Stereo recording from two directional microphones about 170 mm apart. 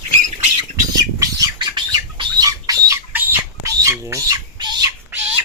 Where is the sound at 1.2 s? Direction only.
25° right (ahead or behind).